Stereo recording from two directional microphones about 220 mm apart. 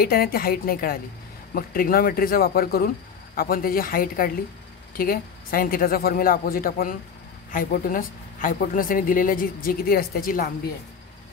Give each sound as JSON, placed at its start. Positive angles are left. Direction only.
{"t": 0.0, "sound": "a woman's voice", "side_deg": 45}